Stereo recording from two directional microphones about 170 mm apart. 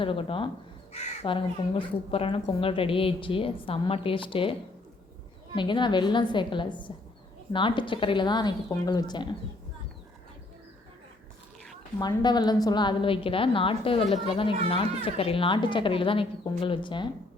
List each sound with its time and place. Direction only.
0.0 s speech: 30° left (ahead or behind)
5.5 s a woman's voice: 30° left (ahead or behind)
11.9 s speech: 25° left (ahead or behind)